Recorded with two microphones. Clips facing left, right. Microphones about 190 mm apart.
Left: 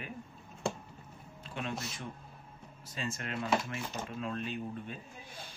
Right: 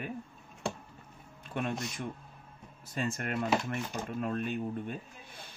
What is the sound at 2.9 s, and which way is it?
Speech, 55° right (ahead or behind).